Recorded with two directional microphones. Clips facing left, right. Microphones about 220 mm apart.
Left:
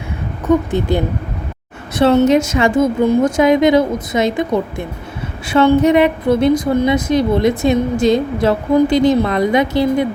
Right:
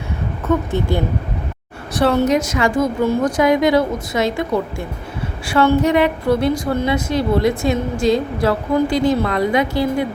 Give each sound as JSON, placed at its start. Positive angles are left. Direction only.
{"t": 0.4, "sound": "a woman's voice", "side_deg": 15}